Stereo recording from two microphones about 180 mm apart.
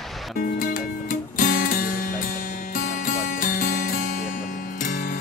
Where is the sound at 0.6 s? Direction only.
50° left (ahead or behind).